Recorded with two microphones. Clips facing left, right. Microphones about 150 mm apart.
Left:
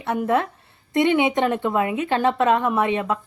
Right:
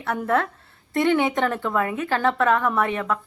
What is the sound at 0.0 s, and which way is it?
A woman's voice, 20° left (ahead or behind).